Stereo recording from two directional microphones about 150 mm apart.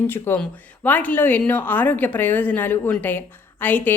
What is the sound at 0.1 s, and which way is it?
Speech, 15° left (ahead or behind).